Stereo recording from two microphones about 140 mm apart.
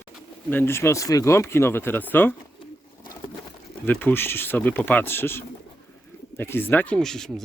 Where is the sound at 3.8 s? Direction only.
15° left (ahead or behind).